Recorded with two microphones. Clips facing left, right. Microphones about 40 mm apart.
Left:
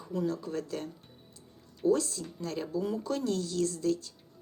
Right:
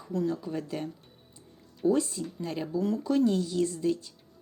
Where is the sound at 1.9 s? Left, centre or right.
Centre.